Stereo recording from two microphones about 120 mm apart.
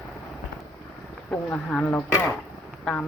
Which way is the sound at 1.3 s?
15° left (ahead or behind).